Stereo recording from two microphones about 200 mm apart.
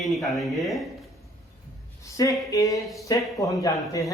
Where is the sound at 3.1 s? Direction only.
15° left (ahead or behind).